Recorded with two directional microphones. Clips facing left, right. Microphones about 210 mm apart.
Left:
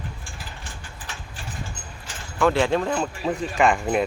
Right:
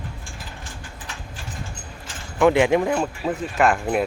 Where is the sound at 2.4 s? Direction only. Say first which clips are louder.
Right 4 dB; 15° right (ahead or behind).